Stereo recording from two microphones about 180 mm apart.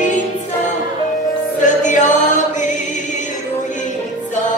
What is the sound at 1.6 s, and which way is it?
Music, 45° left (ahead or behind).